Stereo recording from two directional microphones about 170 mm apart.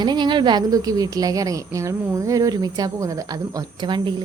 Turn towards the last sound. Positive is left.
turn(degrees=-25)  # may be behind; listen again after turning